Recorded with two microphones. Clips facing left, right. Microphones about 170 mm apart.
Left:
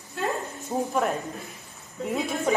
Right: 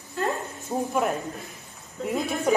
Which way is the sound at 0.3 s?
Centre (ahead or behind).